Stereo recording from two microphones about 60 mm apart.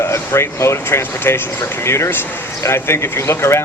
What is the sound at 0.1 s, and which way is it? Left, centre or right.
A man's voice, left.